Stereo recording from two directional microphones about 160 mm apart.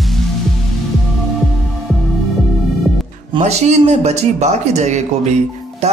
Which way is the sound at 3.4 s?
45° right (ahead or behind).